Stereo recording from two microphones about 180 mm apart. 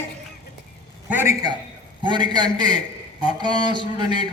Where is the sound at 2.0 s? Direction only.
25° right (ahead or behind).